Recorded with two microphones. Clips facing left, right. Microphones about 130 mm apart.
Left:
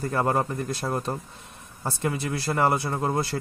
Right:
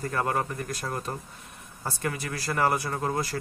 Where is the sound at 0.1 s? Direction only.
25° left (ahead or behind).